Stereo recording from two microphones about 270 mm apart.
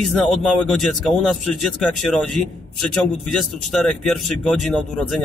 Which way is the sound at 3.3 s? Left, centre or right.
Centre.